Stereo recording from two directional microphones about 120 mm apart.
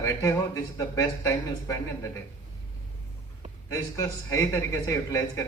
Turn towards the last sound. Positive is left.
turn(degrees=25)  # may be behind; listen again after turning